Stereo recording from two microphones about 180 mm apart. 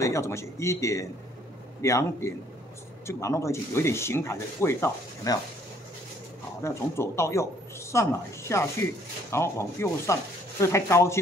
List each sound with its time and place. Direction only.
0.0 s speech: 15° left (ahead or behind)
6.6 s speech: 15° left (ahead or behind)